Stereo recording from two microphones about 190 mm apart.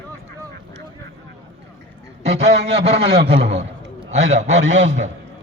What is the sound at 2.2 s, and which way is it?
A man's voice, 35° right (ahead or behind).